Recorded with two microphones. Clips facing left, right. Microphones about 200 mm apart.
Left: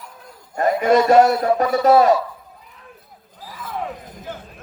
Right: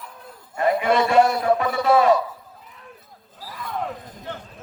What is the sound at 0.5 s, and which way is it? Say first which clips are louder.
A man's voice: left 4 dB; 40° left (ahead or behind).